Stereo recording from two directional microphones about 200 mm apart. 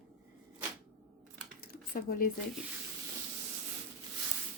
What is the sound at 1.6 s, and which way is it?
Dishes, 45° left (ahead or behind).